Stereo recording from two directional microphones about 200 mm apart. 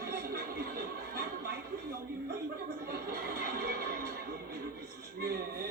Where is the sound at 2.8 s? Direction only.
50° right (ahead or behind).